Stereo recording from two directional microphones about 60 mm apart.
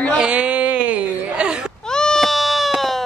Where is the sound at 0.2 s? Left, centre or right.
Centre.